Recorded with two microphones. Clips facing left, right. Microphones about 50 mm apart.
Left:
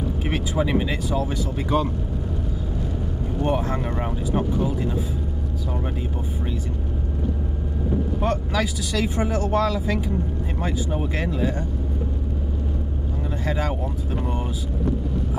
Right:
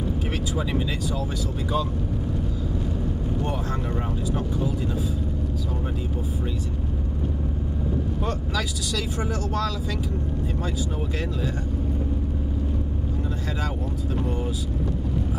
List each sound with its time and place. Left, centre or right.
0.3 s speech: left
8.2 s speech: left